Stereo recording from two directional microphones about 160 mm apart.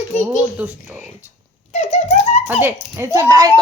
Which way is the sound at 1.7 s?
40° left (ahead or behind).